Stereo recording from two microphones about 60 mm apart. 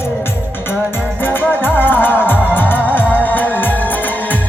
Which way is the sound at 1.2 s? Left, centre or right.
Left.